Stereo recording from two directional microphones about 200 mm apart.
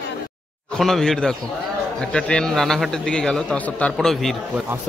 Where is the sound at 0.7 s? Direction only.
Centre (ahead or behind).